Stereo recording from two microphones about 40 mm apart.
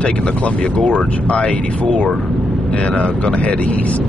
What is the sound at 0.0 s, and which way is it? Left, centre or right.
Speech, left.